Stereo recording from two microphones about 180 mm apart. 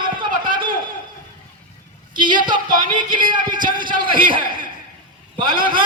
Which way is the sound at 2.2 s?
25° right (ahead or behind).